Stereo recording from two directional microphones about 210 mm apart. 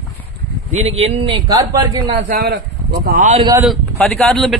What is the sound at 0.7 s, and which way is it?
Speech, 30° right (ahead or behind).